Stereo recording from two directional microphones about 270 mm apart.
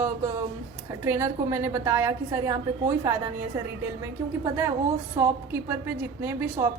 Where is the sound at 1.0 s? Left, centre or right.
Centre.